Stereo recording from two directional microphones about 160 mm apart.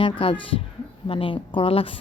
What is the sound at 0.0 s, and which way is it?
Speech, 35° left (ahead or behind).